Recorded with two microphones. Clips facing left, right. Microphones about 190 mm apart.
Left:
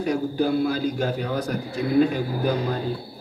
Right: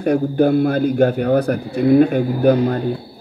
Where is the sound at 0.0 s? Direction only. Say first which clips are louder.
Right 7 dB; 55° right (ahead or behind).